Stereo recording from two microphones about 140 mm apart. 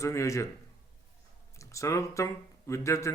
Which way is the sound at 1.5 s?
20° left (ahead or behind).